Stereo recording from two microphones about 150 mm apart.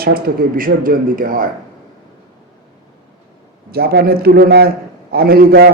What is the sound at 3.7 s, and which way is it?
A man's voice, 90° right.